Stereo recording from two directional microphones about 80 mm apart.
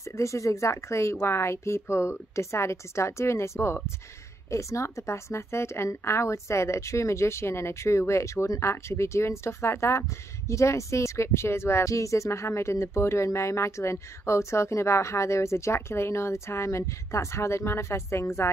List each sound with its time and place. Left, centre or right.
0.2 s speech: left